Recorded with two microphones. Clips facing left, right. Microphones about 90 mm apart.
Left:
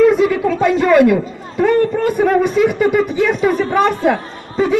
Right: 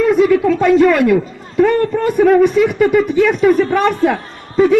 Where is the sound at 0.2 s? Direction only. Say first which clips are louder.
Right 3 dB; 5° left (ahead or behind).